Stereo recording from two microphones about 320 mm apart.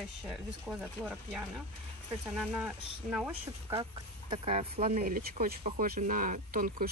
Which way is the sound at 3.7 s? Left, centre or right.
Centre.